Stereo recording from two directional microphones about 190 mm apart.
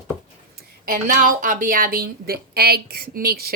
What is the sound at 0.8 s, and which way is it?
Speech, 45° right (ahead or behind).